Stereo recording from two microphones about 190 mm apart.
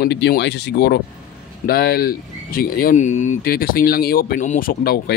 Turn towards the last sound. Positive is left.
turn(degrees=55)  # may be behind; listen again after turning